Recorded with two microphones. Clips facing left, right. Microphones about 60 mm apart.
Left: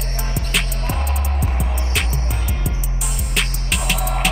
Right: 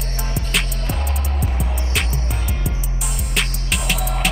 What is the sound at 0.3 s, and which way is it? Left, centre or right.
Music, centre.